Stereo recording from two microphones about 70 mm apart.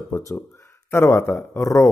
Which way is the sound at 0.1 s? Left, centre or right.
Left.